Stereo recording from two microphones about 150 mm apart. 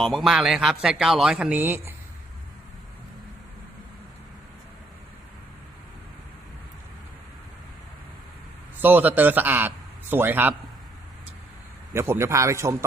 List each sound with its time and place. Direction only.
0.0 s a man's voice: centre (ahead or behind)
8.8 s a man's voice: 15° right (ahead or behind)
11.9 s a man's voice: 15° right (ahead or behind)